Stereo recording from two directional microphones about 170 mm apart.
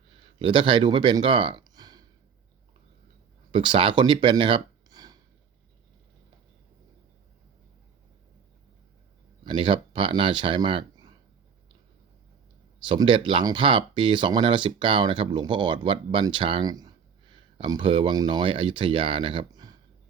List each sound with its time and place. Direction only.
0.3 s speech: 30° right (ahead or behind)
3.5 s speech: 30° right (ahead or behind)
9.4 s speech: 30° right (ahead or behind)
12.8 s speech: 30° right (ahead or behind)